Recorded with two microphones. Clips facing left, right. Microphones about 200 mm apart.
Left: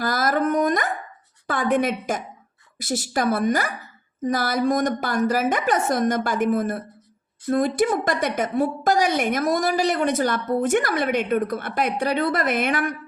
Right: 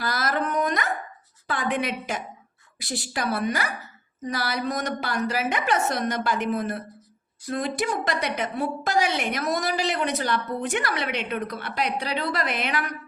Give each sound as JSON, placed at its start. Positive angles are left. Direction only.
{"t": 0.0, "sound": "dog", "side_deg": 45}
{"t": 1.5, "sound": "a woman's voice", "side_deg": 45}